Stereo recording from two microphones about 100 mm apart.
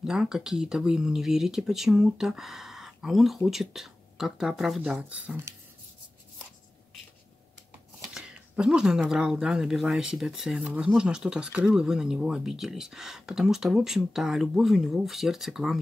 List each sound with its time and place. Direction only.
0.0 s speech: 5° right (ahead or behind)
4.8 s speech: 15° right (ahead or behind)
8.1 s speech: 10° right (ahead or behind)